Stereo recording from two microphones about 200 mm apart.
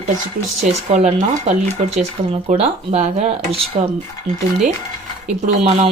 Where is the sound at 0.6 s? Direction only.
35° right (ahead or behind).